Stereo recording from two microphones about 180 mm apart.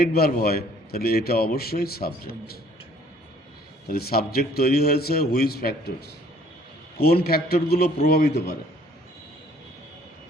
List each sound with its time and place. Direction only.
0.0 s a man's voice: 55° left (ahead or behind)
3.8 s a man's voice: 60° left (ahead or behind)
7.0 s a man's voice: 60° left (ahead or behind)